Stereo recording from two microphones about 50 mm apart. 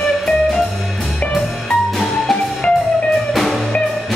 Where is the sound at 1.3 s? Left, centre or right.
Centre.